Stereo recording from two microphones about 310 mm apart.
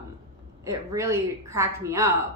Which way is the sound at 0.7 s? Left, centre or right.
Centre.